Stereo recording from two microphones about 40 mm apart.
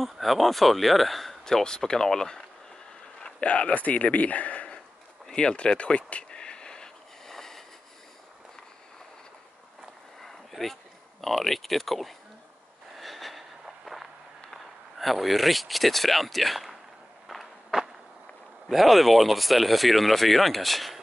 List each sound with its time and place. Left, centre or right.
0.0 s speech: centre
1.4 s speech: centre
3.2 s speech: left
5.3 s a sound: left
7.2 s a sound: centre
10.2 s a sound: centre
14.5 s speech: centre
17.3 s walk: centre
18.7 s speech: centre